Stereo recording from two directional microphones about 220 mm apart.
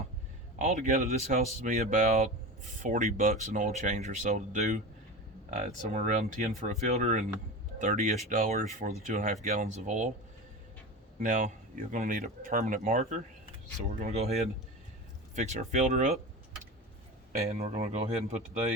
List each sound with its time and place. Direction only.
0.6 s speech: 35° right (ahead or behind)
11.2 s speech: 35° right (ahead or behind)
15.4 s speech: 30° right (ahead or behind)
17.4 s speech: 30° right (ahead or behind)